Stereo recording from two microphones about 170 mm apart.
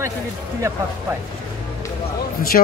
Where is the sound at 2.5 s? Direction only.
50° left (ahead or behind).